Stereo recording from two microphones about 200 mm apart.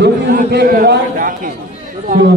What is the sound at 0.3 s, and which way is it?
Chatter, 50° right (ahead or behind).